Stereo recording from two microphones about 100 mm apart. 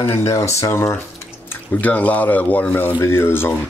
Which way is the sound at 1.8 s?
15° left (ahead or behind).